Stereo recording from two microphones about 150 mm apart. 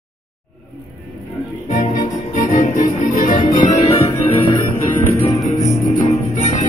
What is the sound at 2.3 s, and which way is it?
Music, 55° left (ahead or behind).